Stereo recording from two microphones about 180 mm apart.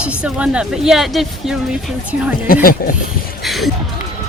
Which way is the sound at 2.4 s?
55° left (ahead or behind).